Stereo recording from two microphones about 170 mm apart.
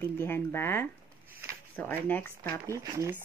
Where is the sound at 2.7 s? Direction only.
20° right (ahead or behind).